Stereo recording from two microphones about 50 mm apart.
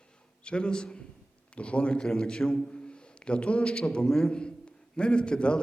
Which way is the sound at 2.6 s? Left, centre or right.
Centre.